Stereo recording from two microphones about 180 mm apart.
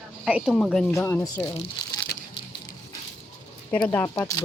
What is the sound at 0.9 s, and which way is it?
Speech, 15° left (ahead or behind).